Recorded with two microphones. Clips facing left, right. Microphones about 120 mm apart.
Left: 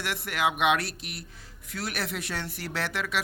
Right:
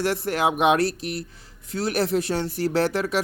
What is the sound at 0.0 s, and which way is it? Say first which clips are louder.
Speech: right 6 dB; 35° right (ahead or behind).